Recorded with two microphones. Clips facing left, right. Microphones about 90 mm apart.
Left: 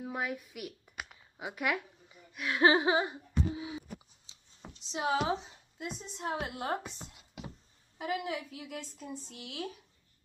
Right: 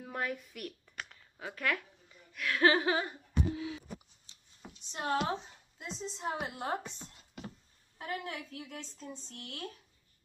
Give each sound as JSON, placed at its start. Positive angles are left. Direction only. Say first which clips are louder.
{"t": 0.0, "sound": "speech", "louder": "left 1 dB", "side_deg": 5}
{"t": 4.9, "sound": "a woman's voice", "louder": "left 2 dB", "side_deg": 5}
{"t": 6.8, "sound": "a sound", "louder": "left 1 dB", "side_deg": 10}
{"t": 8.0, "sound": "a woman's voice", "louder": "left 4 dB", "side_deg": 10}